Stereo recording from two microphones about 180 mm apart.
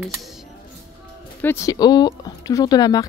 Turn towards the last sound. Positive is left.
turn(degrees=20)  # may be behind; listen again after turning